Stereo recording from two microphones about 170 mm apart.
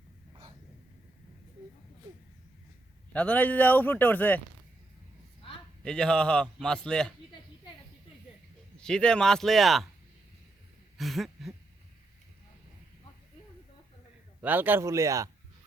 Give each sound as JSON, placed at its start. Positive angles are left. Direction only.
{"t": 3.1, "sound": "speech", "side_deg": 10}
{"t": 5.8, "sound": "a man's voice", "side_deg": 5}
{"t": 8.8, "sound": "a man's voice", "side_deg": 5}
{"t": 10.9, "sound": "a sound", "side_deg": 0}
{"t": 14.4, "sound": "speech", "side_deg": -10}